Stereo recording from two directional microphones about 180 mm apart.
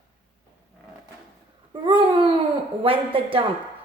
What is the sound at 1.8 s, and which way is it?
A woman's voice, 25° right (ahead or behind).